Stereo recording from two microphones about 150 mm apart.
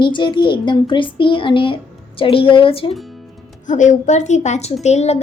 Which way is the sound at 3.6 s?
55° left (ahead or behind).